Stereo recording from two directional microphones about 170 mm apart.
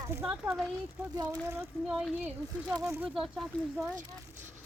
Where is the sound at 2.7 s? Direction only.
15° right (ahead or behind).